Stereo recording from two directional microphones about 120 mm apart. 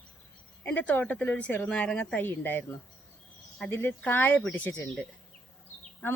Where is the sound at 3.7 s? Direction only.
20° left (ahead or behind).